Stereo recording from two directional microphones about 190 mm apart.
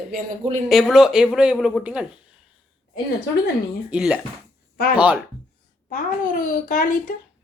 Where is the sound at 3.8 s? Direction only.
5° right (ahead or behind).